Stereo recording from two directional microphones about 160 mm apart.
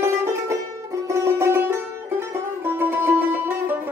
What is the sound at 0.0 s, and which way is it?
Music, 20° right (ahead or behind).